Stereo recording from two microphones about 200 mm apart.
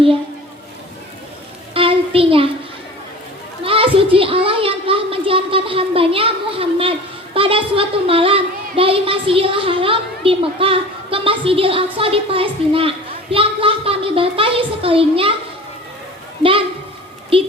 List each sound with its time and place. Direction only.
1.7 s a sound: 25° right (ahead or behind)
3.6 s a woman's voice: 25° right (ahead or behind)
16.4 s a woman's voice: 25° right (ahead or behind)